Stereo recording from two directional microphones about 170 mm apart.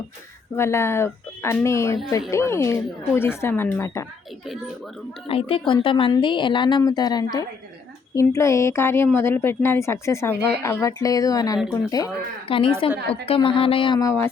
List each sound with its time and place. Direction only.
0.5 s speech: 15° left (ahead or behind)
5.3 s speech: 35° left (ahead or behind)